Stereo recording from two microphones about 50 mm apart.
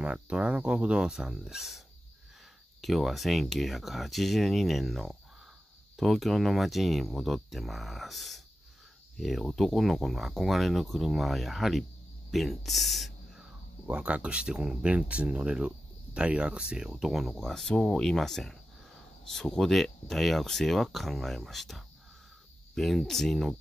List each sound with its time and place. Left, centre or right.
0.0 s speech: right
2.8 s speech: centre
13.8 s speech: right; by 17.4 s centre
17.4 s speech: centre